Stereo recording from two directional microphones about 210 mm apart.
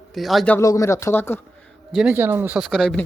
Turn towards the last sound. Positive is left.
turn(degrees=5)  # may be behind; listen again after turning